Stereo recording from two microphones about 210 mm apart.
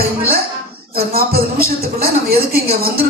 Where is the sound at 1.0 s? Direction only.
45° right (ahead or behind).